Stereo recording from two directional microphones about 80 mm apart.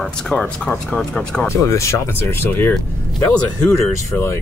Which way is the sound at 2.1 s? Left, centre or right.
Left.